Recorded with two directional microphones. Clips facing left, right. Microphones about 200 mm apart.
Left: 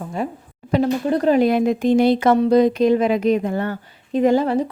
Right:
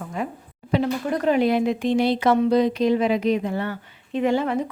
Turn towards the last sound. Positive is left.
turn(degrees=35)  # may be behind; listen again after turning